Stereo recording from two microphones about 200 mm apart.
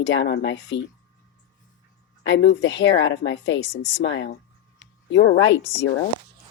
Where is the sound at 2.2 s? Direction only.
60° left (ahead or behind).